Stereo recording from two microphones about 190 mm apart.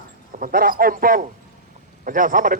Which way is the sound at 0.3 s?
45° right (ahead or behind).